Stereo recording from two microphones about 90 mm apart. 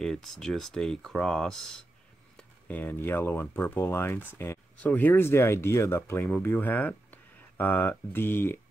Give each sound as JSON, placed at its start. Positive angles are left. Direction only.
{"t": 0.0, "sound": "speech", "side_deg": 5}
{"t": 2.7, "sound": "speech", "side_deg": 20}